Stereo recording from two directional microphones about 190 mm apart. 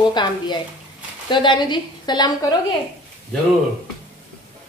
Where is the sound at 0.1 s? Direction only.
25° left (ahead or behind).